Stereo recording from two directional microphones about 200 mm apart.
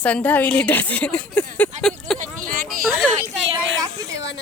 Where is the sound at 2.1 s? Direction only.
45° right (ahead or behind).